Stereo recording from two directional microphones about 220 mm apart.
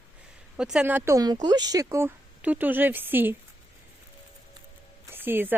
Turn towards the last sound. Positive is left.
turn(degrees=-10)  # may be behind; listen again after turning